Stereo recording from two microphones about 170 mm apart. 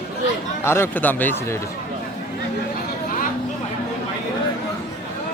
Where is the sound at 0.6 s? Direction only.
15° left (ahead or behind).